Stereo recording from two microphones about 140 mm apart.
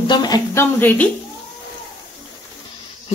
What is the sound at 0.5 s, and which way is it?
Speech, 10° left (ahead or behind).